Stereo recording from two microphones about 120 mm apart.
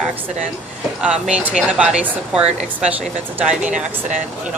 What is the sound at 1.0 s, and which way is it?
A woman's voice, 10° right (ahead or behind).